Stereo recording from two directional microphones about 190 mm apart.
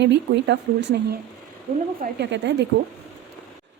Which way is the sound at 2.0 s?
65° right (ahead or behind).